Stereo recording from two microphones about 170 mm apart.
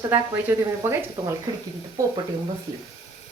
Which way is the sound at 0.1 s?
10° right (ahead or behind).